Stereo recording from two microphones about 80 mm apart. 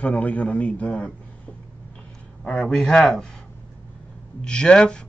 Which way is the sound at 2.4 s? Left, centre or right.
Centre.